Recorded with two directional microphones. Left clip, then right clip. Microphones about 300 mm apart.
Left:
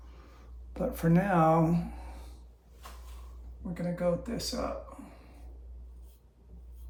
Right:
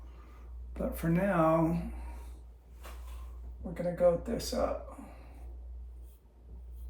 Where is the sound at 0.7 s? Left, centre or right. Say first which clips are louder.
Left 4 dB; centre.